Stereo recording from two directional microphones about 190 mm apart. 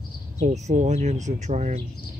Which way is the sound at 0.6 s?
35° right (ahead or behind).